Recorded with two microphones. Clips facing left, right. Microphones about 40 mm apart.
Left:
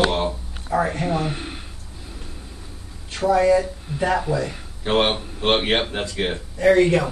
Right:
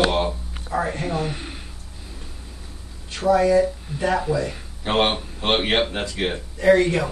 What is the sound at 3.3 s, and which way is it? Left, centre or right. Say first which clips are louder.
Speech: left 1 dB; left.